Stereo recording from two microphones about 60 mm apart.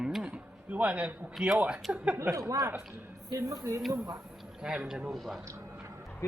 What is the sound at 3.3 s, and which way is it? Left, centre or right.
Speech, right.